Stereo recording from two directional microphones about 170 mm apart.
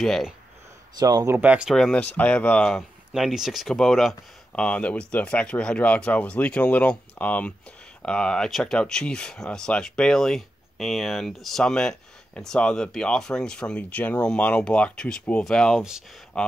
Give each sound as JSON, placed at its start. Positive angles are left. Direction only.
{"t": 0.0, "sound": "speech", "side_deg": 0}
{"t": 0.9, "sound": "speech", "side_deg": -20}